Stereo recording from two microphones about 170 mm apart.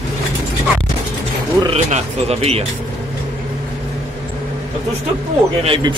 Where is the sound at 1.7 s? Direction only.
40° right (ahead or behind).